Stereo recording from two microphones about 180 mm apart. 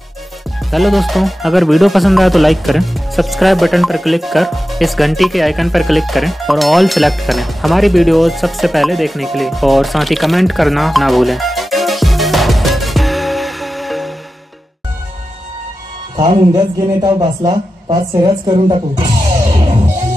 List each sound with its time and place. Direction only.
0.7 s speech: centre (ahead or behind)
16.2 s a woman's voice: 25° right (ahead or behind)